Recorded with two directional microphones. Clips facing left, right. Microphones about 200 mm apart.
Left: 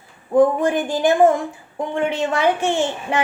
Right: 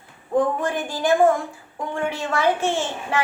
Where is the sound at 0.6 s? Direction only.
20° left (ahead or behind).